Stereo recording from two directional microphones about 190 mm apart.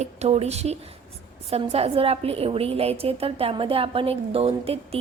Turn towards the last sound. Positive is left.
turn(degrees=-30)  # may be behind; listen again after turning